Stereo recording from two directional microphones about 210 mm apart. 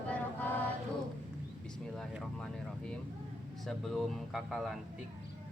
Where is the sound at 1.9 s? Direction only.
Centre (ahead or behind).